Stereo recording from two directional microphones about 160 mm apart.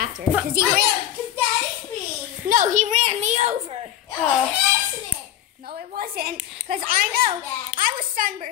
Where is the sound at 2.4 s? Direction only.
55° right (ahead or behind); by 3.9 s 40° right (ahead or behind).